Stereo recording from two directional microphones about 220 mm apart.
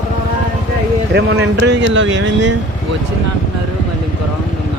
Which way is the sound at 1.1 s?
55° right (ahead or behind).